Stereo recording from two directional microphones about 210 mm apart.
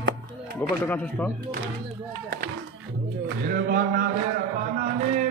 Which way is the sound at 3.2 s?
40° right (ahead or behind).